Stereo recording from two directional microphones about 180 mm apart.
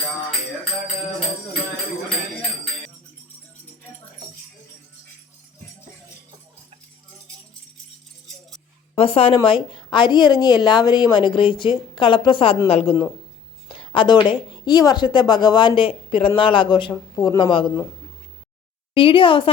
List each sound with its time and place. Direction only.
9.0 s a woman's voice: 30° left (ahead or behind)
13.7 s a sound: 30° left (ahead or behind)
14.6 s a woman's voice: 20° left (ahead or behind)
18.9 s a woman's voice: 30° left (ahead or behind)